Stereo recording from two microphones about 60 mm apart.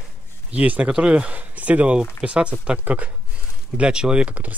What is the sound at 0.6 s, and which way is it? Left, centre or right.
Speech, right.